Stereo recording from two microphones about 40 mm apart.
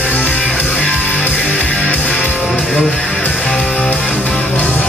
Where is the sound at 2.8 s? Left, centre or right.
Left.